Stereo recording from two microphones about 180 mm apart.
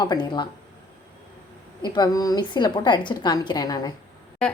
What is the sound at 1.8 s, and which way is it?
Speech, 25° left (ahead or behind).